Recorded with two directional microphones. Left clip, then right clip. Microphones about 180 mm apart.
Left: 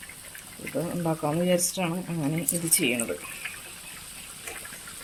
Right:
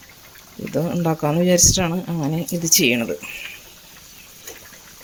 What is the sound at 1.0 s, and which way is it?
A woman's voice, 40° right (ahead or behind).